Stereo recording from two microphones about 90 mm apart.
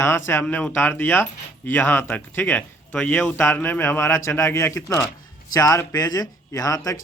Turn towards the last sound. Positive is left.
turn(degrees=40)  # may be behind; listen again after turning